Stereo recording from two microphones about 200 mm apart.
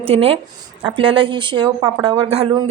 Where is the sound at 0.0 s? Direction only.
30° right (ahead or behind).